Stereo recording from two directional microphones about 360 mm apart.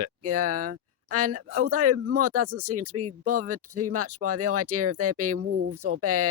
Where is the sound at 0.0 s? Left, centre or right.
Right.